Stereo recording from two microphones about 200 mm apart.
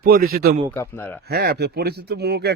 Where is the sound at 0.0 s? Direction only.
50° right (ahead or behind).